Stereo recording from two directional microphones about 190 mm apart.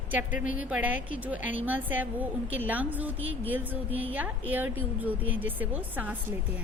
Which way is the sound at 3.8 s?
30° right (ahead or behind).